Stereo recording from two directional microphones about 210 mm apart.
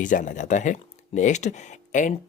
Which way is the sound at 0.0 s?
40° left (ahead or behind).